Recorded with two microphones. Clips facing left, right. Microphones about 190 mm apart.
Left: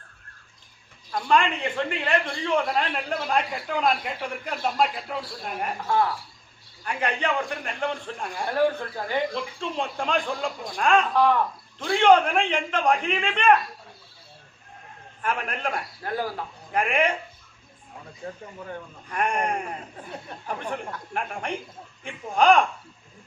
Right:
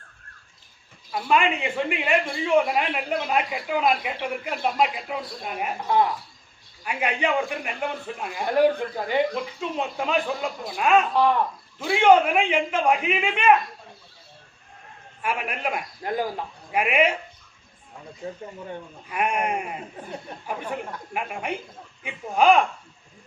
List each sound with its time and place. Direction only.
1.1 s a man's voice: 10° right (ahead or behind)
5.9 s speech: 20° right (ahead or behind)
6.8 s a man's voice: 10° right (ahead or behind)
8.5 s a man's voice: 15° right (ahead or behind)
9.6 s a woman's voice: 5° right (ahead or behind)
15.2 s a man's voice: 10° right (ahead or behind)
19.0 s a man's voice: 10° right (ahead or behind)